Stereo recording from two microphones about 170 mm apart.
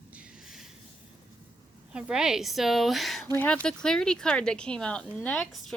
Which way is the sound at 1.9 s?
5° right (ahead or behind).